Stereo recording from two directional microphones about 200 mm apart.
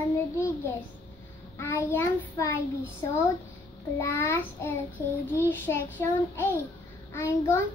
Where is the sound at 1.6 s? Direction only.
10° left (ahead or behind).